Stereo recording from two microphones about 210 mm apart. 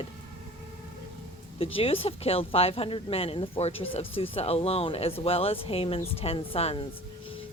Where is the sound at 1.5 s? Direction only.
25° left (ahead or behind).